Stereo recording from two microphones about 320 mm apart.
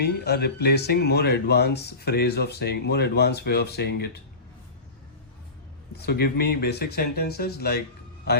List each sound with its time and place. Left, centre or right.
0.0 s speech: left
6.1 s speech: left